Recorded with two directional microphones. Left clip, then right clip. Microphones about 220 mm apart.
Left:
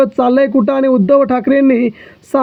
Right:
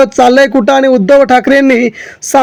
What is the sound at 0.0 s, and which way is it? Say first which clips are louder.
Speech: right 6 dB; 20° right (ahead or behind).